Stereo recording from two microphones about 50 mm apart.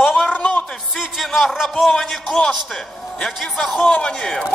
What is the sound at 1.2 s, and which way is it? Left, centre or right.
Speech, centre.